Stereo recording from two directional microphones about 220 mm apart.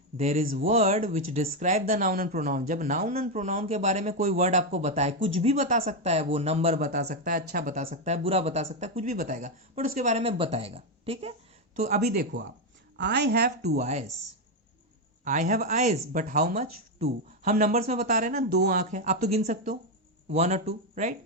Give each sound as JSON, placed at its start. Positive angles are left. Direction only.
{"t": 0.2, "sound": "speech", "side_deg": -30}
{"t": 13.0, "sound": "speech", "side_deg": -50}
{"t": 13.7, "sound": "speech", "side_deg": -30}
{"t": 15.2, "sound": "speech", "side_deg": -35}